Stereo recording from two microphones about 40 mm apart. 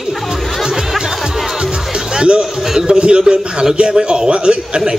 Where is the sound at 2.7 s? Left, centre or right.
Right.